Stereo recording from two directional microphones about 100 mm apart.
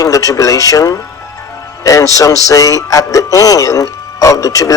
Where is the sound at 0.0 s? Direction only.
35° left (ahead or behind).